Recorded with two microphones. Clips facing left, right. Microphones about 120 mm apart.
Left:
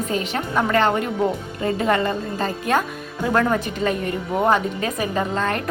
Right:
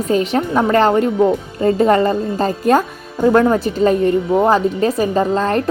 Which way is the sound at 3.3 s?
25° right (ahead or behind).